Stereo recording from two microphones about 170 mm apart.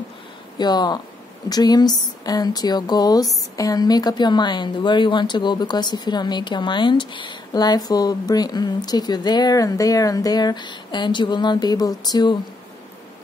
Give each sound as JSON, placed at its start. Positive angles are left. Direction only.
{"t": 0.6, "sound": "speech", "side_deg": 25}